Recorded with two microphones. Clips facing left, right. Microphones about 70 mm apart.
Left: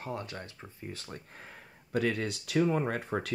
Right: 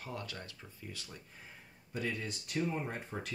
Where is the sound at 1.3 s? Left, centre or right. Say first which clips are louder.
Left 5 dB; left.